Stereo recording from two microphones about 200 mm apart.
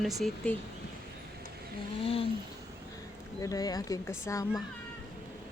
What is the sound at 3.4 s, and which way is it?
Speech, 20° left (ahead or behind).